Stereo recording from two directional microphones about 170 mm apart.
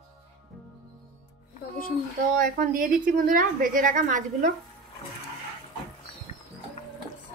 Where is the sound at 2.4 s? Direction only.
55° right (ahead or behind).